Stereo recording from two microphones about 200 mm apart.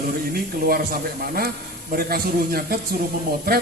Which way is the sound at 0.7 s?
50° right (ahead or behind).